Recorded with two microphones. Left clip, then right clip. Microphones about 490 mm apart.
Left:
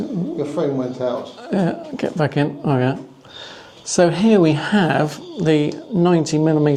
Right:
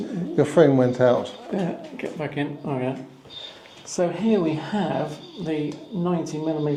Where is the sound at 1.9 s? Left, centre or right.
Left.